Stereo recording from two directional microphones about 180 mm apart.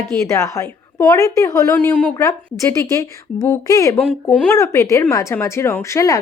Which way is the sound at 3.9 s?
5° left (ahead or behind).